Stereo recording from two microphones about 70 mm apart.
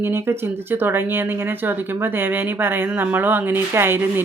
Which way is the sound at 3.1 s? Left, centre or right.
Right.